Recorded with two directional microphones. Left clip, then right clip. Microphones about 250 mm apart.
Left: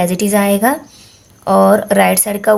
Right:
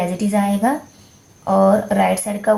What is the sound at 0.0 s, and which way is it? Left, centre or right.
A woman's voice, left.